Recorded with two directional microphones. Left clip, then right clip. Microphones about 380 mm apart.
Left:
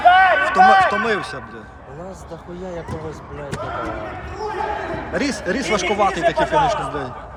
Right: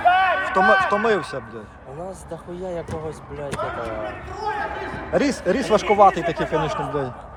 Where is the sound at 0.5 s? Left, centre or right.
Centre.